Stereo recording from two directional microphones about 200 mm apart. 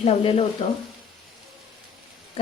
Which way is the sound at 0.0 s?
30° left (ahead or behind).